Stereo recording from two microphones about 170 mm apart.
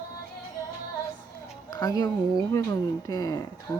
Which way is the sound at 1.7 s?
20° left (ahead or behind).